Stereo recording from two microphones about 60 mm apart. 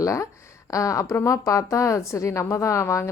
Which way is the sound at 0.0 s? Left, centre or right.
Left.